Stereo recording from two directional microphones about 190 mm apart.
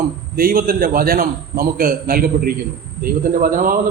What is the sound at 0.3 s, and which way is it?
A man's voice, 50° right (ahead or behind).